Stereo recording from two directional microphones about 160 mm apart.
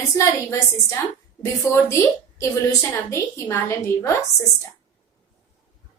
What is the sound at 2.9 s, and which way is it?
A child's voice, 15° left (ahead or behind).